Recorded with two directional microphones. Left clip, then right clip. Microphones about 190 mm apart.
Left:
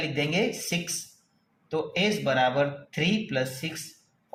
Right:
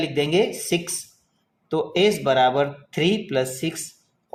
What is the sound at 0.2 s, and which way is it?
Speech, 40° right (ahead or behind).